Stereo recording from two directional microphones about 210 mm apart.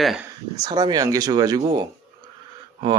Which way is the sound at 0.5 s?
20° right (ahead or behind).